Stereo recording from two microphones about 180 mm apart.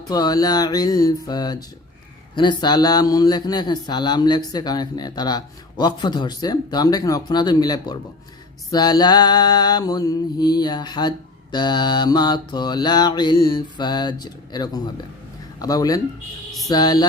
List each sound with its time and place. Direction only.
0.1 s a man's voice: 20° left (ahead or behind)